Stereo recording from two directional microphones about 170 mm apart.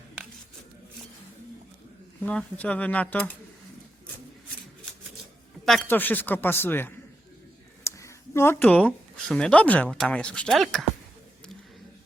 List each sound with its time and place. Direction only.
2.2 s speech: 10° left (ahead or behind)
5.6 s speech: 5° left (ahead or behind)
7.9 s a sound: 15° left (ahead or behind)
8.6 s speech: 5° left (ahead or behind)